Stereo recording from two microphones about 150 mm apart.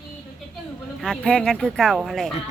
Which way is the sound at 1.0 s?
5° left (ahead or behind).